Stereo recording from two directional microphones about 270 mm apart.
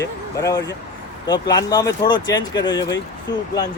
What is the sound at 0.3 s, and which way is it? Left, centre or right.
Speech, centre.